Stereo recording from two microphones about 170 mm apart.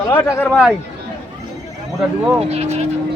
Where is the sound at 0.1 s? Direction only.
10° left (ahead or behind).